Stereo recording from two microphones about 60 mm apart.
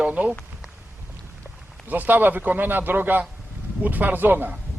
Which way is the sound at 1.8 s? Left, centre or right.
Right.